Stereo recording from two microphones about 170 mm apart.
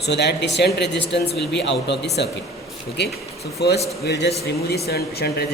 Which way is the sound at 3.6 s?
80° left.